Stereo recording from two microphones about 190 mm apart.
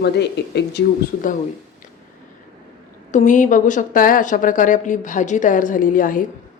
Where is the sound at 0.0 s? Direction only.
60° left (ahead or behind).